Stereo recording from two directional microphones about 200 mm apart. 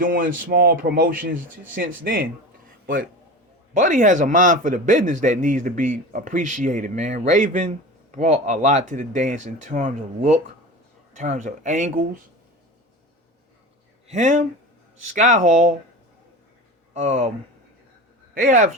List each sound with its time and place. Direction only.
0.0 s a man's voice: 45° right (ahead or behind)
14.1 s a man's voice: 35° right (ahead or behind)
16.9 s a man's voice: 35° right (ahead or behind)
18.4 s a man's voice: 40° right (ahead or behind)